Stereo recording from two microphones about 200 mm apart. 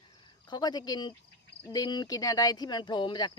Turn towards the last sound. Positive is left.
turn(degrees=20)  # may be behind; listen again after turning